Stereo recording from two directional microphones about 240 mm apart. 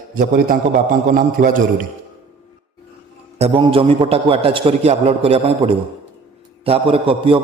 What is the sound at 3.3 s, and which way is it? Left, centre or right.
A man's voice, right.